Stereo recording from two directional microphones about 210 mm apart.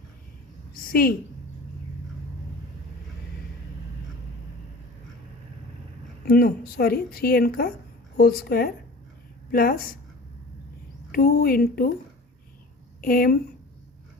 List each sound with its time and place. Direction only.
0.9 s a woman's voice: 45° left (ahead or behind)
6.2 s a woman's voice: 45° left (ahead or behind)
11.1 s a woman's voice: 45° left (ahead or behind)
13.0 s speech: 45° left (ahead or behind)